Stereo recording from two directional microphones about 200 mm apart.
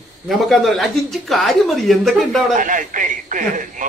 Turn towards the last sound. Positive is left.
turn(degrees=-40)  # may be behind; listen again after turning